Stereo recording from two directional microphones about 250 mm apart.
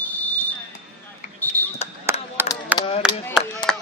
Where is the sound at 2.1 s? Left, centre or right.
Centre.